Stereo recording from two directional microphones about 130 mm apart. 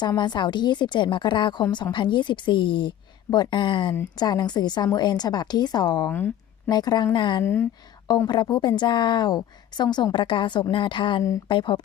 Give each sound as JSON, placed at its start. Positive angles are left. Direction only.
{"t": 0.0, "sound": "a woman's voice", "side_deg": 35}
{"t": 6.1, "sound": "speech", "side_deg": 15}
{"t": 6.7, "sound": "a woman's voice", "side_deg": 30}
{"t": 7.4, "sound": "speech", "side_deg": 15}
{"t": 8.0, "sound": "a woman's voice", "side_deg": 30}